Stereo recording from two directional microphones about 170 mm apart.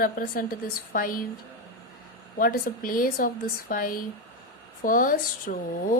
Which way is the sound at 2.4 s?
55° left (ahead or behind).